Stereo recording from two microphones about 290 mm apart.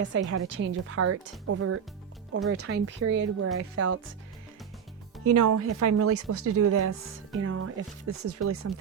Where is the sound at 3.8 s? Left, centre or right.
Right.